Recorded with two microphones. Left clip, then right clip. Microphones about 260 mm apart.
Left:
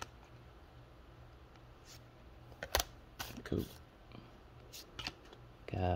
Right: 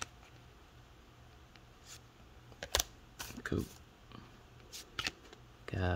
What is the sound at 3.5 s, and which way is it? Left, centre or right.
Speech, centre.